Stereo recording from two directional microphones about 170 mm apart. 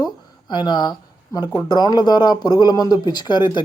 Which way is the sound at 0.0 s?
25° left (ahead or behind).